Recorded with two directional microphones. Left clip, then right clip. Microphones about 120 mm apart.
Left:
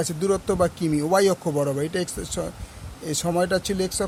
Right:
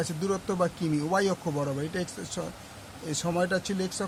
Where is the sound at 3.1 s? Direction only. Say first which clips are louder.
Left 5 dB; 55° left (ahead or behind).